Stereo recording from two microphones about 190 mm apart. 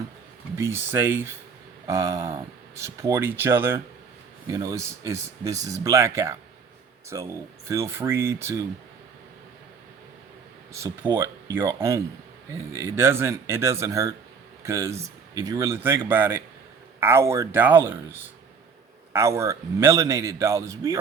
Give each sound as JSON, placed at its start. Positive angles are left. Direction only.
{"t": 0.5, "sound": "a man's voice", "side_deg": -15}
{"t": 10.7, "sound": "a man's voice", "side_deg": -15}